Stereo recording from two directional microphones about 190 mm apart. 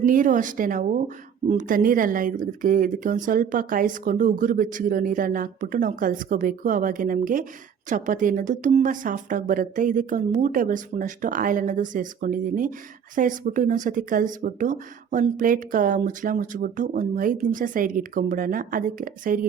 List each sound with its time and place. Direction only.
0.0 s speech: 45° right (ahead or behind)